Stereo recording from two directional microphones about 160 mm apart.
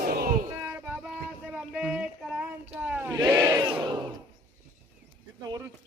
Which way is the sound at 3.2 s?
10° right (ahead or behind).